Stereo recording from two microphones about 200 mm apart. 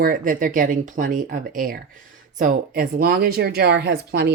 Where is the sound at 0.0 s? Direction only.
45° right (ahead or behind).